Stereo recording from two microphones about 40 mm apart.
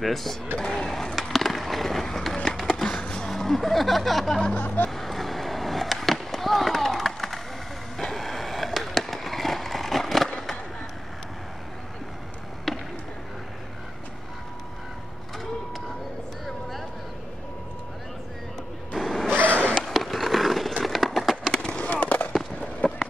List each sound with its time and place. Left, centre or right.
0.0 s speech: centre
0.8 s skateboard: centre
3.3 s speech: centre
4.6 s speech: left
4.9 s skateboard: centre
12.7 s a sound: centre
18.9 s vehicle: centre
19.3 s sniff: right
19.9 s a sound: centre
21.5 s skateboard: left
22.6 s a sound: left